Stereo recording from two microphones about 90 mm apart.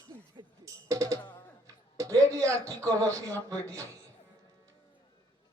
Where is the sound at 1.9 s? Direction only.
40° right (ahead or behind).